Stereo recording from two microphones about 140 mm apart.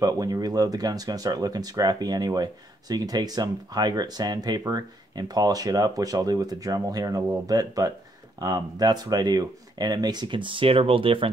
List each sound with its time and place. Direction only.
0.0 s speech: 25° right (ahead or behind)